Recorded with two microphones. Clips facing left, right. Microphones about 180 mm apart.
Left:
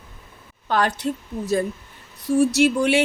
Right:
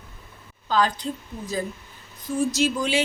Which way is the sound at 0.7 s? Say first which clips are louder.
Left 1 dB; 65° left (ahead or behind).